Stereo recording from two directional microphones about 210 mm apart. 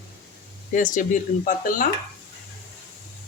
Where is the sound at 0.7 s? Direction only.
40° left (ahead or behind).